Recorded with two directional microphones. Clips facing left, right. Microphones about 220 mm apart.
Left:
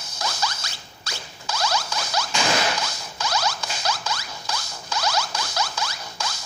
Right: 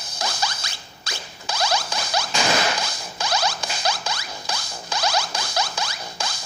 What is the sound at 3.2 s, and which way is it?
Zipper, 30° right (ahead or behind).